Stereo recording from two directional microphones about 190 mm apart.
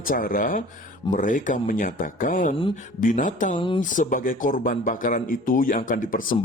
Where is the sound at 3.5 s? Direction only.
25° left (ahead or behind).